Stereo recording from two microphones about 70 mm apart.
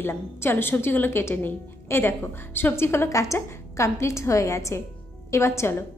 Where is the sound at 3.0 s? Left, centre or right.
Left.